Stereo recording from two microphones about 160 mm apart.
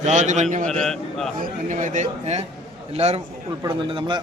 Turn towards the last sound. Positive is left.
turn(degrees=-30)  # may be behind; listen again after turning